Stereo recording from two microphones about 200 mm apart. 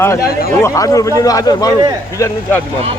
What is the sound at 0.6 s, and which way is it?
Speech, 15° left (ahead or behind).